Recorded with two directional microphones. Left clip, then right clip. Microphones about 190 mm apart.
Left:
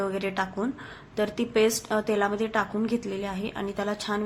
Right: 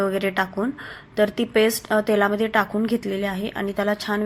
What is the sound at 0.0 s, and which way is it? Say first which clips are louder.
Speech: right 6 dB; 25° right (ahead or behind).